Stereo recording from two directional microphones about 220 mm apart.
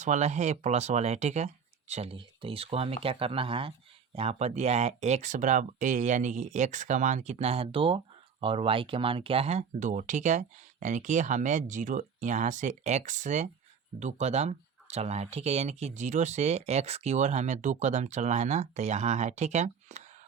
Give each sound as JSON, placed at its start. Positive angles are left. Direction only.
{"t": 0.0, "sound": "speech", "side_deg": -30}